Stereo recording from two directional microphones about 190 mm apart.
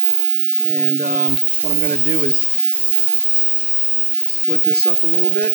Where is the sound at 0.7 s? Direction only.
45° right (ahead or behind).